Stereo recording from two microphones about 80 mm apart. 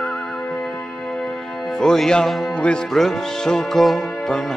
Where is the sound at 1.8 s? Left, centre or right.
Centre.